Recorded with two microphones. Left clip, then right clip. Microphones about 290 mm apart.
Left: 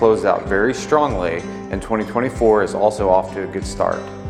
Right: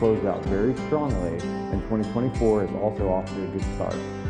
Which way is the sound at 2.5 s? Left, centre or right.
Centre.